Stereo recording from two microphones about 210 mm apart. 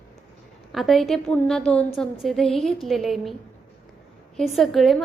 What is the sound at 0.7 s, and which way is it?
A woman's voice, centre (ahead or behind).